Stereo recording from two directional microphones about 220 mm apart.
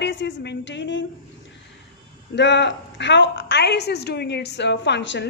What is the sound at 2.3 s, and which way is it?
A woman's voice, 50° left (ahead or behind).